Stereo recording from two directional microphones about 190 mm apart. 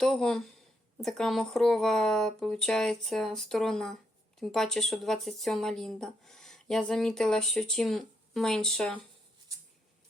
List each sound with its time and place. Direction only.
0.0 s speech: centre (ahead or behind)